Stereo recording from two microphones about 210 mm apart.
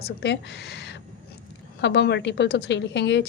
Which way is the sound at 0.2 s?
55° left (ahead or behind).